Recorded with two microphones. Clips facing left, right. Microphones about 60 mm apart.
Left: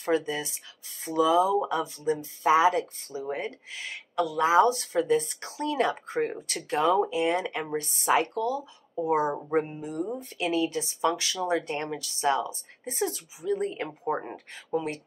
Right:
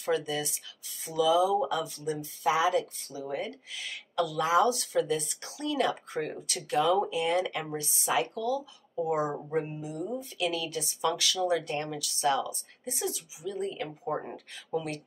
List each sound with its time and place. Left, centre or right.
0.0 s speech: left
7.7 s speech: left
10.4 s speech: left